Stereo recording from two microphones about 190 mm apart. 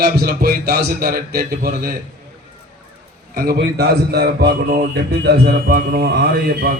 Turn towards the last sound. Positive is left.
turn(degrees=-55)  # may be behind; listen again after turning